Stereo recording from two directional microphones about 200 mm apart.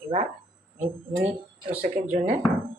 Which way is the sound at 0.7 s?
35° right (ahead or behind).